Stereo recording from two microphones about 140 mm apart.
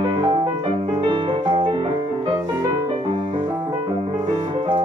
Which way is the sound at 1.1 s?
35° right (ahead or behind).